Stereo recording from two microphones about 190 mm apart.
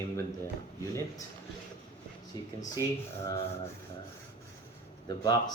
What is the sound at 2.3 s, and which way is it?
Speech, 20° left (ahead or behind).